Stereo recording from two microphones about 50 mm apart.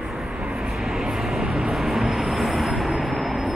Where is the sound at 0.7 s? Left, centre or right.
Centre.